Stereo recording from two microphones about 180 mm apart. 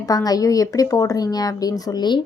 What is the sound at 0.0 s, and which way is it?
A woman's voice, 20° left (ahead or behind).